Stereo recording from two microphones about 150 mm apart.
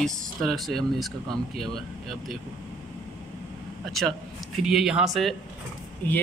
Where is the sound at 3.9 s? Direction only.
Centre (ahead or behind).